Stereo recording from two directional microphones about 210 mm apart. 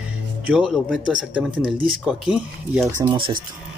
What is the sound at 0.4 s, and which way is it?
Speech, 5° right (ahead or behind).